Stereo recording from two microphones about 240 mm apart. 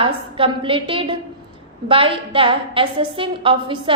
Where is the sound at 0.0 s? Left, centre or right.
Right.